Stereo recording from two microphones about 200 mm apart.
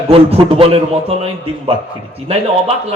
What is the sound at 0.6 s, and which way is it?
Speech, 30° right (ahead or behind).